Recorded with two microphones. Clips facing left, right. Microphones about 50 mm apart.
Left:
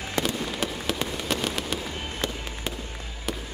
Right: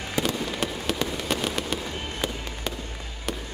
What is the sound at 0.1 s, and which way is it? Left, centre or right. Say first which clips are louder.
Fireworks: right 1 dB; centre.